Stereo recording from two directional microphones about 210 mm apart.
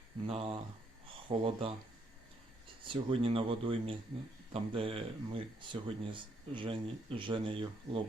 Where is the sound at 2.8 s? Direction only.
25° right (ahead or behind).